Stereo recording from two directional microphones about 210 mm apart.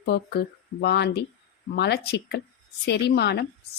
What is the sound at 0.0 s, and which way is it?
A woman's voice, 50° left (ahead or behind).